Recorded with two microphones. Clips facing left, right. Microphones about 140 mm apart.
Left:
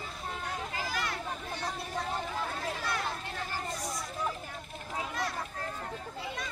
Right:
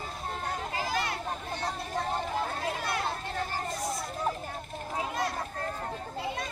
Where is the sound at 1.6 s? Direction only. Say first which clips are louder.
Right 3 dB; 40° right (ahead or behind).